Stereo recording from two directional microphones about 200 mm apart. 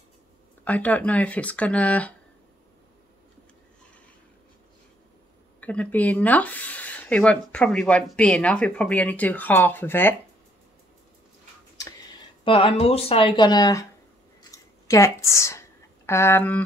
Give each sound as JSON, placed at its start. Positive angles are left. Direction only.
{"t": 0.7, "sound": "speech", "side_deg": 10}
{"t": 5.6, "sound": "speech", "side_deg": 5}
{"t": 12.4, "sound": "speech", "side_deg": 25}
{"t": 14.4, "sound": "scissors", "side_deg": 15}
{"t": 16.1, "sound": "speech", "side_deg": 10}